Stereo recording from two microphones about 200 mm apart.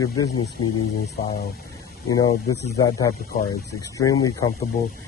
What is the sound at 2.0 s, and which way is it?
Speech, 20° left (ahead or behind).